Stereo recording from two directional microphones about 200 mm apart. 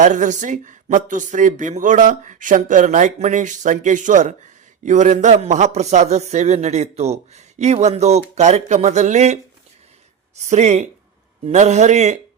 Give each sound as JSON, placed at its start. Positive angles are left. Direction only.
{"t": 0.0, "sound": "a man's voice", "side_deg": -40}